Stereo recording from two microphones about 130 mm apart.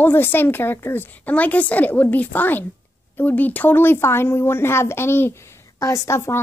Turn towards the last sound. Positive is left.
turn(degrees=20)  # may be behind; listen again after turning